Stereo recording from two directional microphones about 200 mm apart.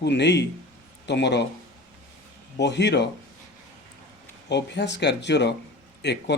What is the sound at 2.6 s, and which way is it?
Speech, 60° left (ahead or behind).